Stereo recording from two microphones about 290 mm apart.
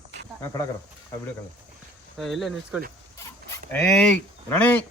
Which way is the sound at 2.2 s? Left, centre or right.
Centre.